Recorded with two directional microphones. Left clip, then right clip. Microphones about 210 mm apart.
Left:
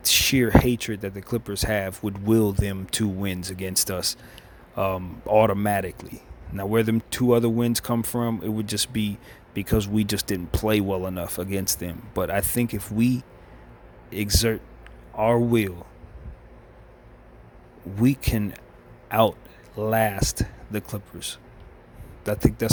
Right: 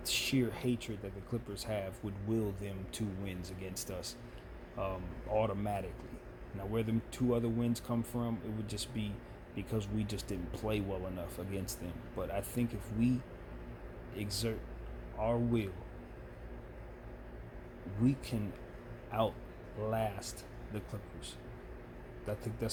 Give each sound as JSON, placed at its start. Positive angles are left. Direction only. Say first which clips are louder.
{"t": 0.0, "sound": "speech", "louder": "left 14 dB", "side_deg": 45}
{"t": 18.0, "sound": "speech", "louder": "left 12 dB", "side_deg": 45}